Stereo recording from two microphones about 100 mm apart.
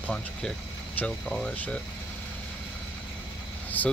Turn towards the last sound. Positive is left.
turn(degrees=15)  # may be behind; listen again after turning